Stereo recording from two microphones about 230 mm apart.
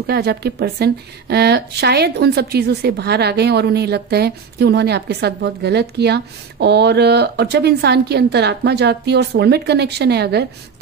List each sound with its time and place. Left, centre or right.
0.0 s a woman's voice: right